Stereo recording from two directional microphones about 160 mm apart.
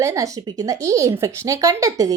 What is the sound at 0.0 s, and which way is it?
A woman's voice, 20° right (ahead or behind).